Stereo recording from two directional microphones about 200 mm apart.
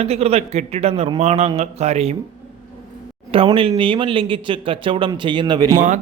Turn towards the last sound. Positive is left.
turn(degrees=-40)  # may be behind; listen again after turning